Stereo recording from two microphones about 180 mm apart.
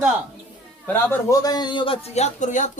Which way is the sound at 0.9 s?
15° left (ahead or behind).